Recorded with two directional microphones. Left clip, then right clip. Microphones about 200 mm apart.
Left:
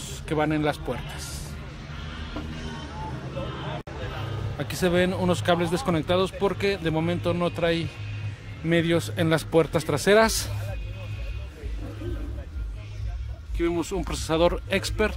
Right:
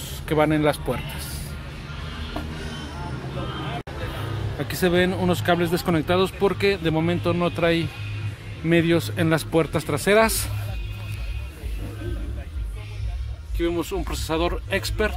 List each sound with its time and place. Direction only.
0.3 s speech: 5° right (ahead or behind)
4.6 s speech: 10° left (ahead or behind)
13.6 s speech: 15° left (ahead or behind)